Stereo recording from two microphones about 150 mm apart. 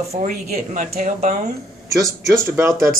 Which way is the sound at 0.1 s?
55° right (ahead or behind).